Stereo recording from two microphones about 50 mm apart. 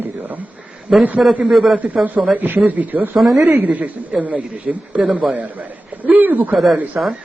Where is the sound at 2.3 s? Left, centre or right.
Right.